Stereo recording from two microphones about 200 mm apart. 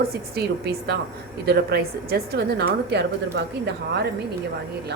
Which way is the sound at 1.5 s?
50° right (ahead or behind).